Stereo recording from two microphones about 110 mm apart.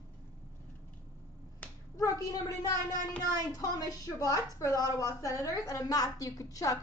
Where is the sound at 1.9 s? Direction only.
30° left (ahead or behind).